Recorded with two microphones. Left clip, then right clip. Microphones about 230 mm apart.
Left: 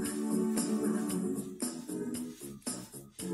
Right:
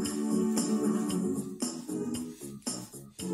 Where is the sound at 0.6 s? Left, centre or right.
Right.